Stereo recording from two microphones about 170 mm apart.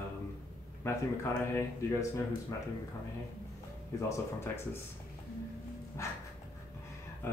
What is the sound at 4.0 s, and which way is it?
Speech, 15° left (ahead or behind).